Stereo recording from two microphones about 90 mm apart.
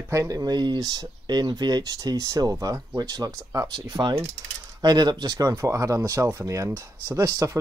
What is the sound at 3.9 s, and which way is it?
Coin, 60° right (ahead or behind).